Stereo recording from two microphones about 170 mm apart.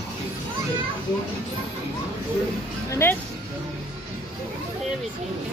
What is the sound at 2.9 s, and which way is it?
Music, 15° left (ahead or behind).